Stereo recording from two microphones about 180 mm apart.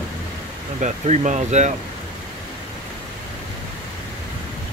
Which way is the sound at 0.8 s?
40° right (ahead or behind).